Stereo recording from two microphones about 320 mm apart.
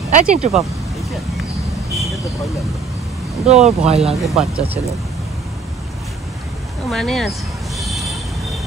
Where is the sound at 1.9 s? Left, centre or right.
Centre.